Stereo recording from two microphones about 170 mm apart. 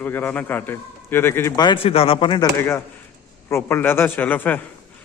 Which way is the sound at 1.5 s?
30° left (ahead or behind).